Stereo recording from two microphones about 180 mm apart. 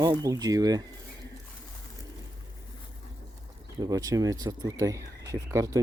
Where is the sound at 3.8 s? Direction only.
20° right (ahead or behind).